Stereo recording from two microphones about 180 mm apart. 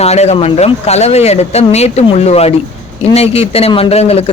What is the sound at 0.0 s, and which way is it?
Speech, 35° left (ahead or behind).